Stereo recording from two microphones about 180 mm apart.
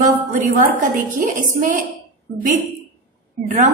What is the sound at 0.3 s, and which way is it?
A woman's voice, 45° right (ahead or behind).